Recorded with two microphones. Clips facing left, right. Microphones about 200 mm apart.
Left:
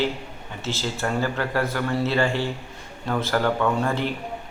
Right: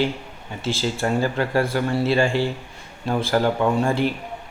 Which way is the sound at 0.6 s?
10° right (ahead or behind).